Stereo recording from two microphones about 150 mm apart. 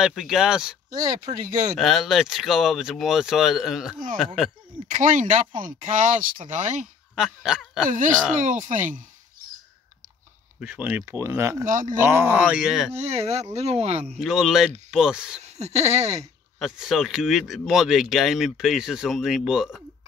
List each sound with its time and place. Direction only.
0.0 s speech: 5° right (ahead or behind)
0.8 s speech: 55° right (ahead or behind)
1.8 s speech: centre (ahead or behind)
4.8 s speech: 60° right (ahead or behind)
7.2 s speech: 5° right (ahead or behind)
8.4 s speech: 60° right (ahead or behind)
10.6 s speech: 10° right (ahead or behind)
11.6 s speech: 60° right (ahead or behind)
12.0 s speech: 15° right (ahead or behind)
12.9 s speech: 45° right (ahead or behind)
14.0 s speech: 5° left (ahead or behind)
15.4 s speech: 45° right (ahead or behind)
16.5 s speech: 5° right (ahead or behind)